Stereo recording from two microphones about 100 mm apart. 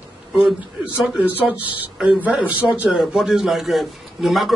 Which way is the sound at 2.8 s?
5° right (ahead or behind).